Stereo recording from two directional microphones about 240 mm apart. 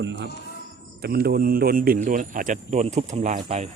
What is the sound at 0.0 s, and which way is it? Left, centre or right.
Speech, right.